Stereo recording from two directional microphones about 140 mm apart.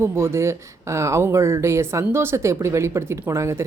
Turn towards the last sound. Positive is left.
turn(degrees=-20)  # may be behind; listen again after turning